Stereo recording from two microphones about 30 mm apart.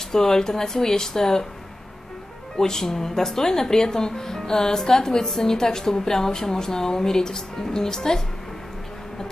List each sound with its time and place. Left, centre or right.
0.1 s a woman's voice: centre
2.5 s a woman's voice: centre